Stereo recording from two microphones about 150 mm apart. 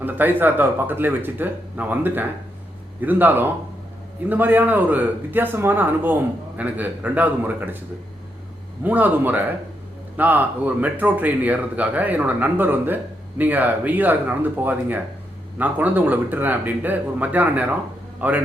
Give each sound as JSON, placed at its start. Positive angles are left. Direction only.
{"t": 0.0, "sound": "speech", "side_deg": -10}
{"t": 8.8, "sound": "a man's voice", "side_deg": -10}